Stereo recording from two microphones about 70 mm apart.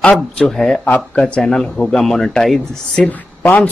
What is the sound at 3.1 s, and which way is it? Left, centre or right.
Speech, left.